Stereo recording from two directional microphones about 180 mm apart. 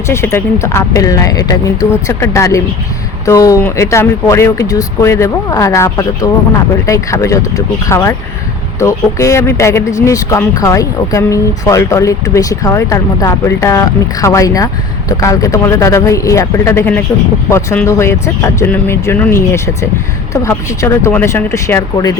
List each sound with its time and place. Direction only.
0.1 s speech: 15° left (ahead or behind)